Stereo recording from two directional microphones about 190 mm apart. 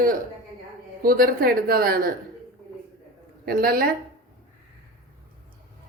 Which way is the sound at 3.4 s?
50° right (ahead or behind).